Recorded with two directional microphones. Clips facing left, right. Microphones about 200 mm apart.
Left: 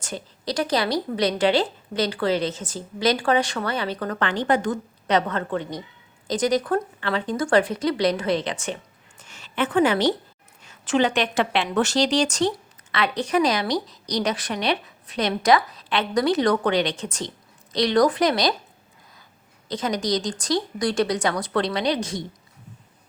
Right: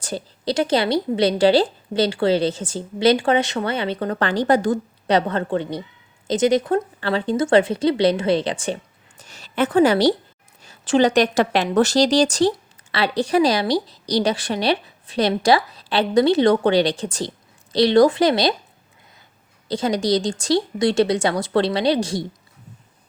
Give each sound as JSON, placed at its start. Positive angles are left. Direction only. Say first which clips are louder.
{"t": 0.0, "sound": "speech", "louder": "right 5 dB", "side_deg": -30}
{"t": 19.6, "sound": "speech", "louder": "right 5 dB", "side_deg": -30}